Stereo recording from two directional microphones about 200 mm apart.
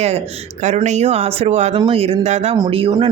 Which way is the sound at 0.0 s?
30° right (ahead or behind).